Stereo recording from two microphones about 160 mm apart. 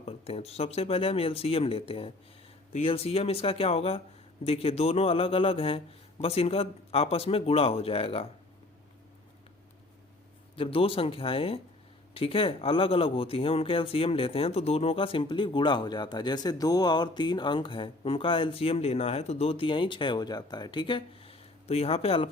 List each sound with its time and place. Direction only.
0.0 s speech: 40° left (ahead or behind)
10.5 s speech: 35° left (ahead or behind)